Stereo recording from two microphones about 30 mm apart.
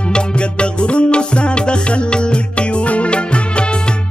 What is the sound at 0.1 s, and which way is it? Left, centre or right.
Music, left.